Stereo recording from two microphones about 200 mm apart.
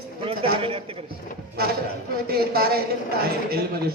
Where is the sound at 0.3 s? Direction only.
30° right (ahead or behind).